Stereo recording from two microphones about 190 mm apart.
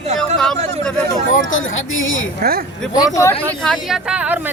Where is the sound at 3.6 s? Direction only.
Centre (ahead or behind).